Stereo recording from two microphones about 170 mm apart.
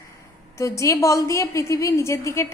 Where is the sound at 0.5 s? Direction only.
15° left (ahead or behind).